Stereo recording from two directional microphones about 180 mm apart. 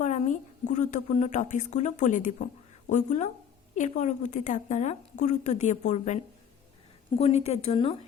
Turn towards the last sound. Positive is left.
turn(degrees=30)  # may be behind; listen again after turning